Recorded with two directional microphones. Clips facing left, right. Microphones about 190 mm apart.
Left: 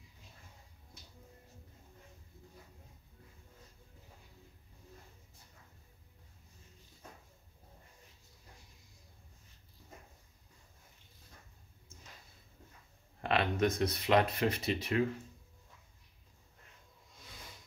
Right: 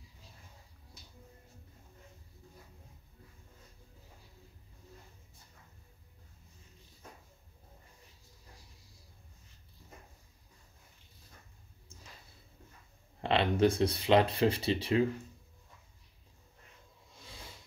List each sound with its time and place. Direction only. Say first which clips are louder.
13.2 s speech: right 4 dB; 30° right (ahead or behind)